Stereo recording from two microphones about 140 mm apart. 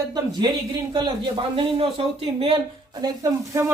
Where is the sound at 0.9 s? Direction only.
35° right (ahead or behind).